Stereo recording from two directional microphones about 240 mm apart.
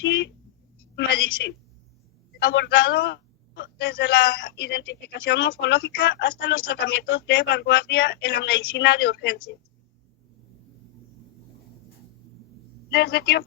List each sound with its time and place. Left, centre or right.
0.0 s a sound: left
2.5 s a man's voice: left
12.9 s speech: left